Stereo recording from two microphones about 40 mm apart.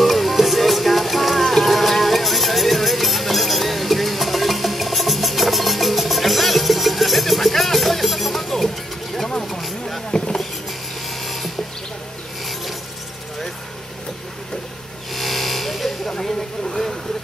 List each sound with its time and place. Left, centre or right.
0.0 s music: centre
9.4 s a sound: centre
10.1 s vehicle: centre
11.2 s mechanisms: centre
15.1 s vehicle: centre
16.2 s a sound: centre